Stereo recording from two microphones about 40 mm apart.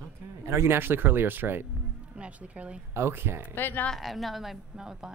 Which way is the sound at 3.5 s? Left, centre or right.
Left.